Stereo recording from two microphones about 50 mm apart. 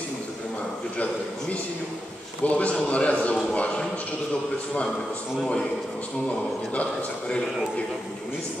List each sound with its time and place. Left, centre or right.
2.4 s a man's voice: left
6.7 s a man's voice: left